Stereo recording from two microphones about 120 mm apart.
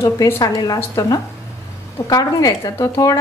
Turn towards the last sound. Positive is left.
turn(degrees=25)  # may be behind; listen again after turning